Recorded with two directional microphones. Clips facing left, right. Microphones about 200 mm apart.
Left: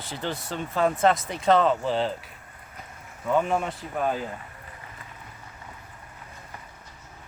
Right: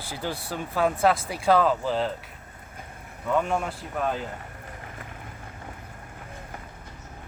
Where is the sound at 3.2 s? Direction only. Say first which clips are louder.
Left 1 dB; centre (ahead or behind).